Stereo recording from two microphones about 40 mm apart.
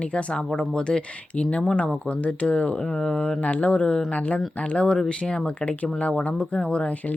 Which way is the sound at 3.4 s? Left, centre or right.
Left.